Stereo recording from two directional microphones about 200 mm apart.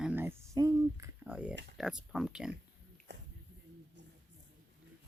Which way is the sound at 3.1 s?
60° right (ahead or behind).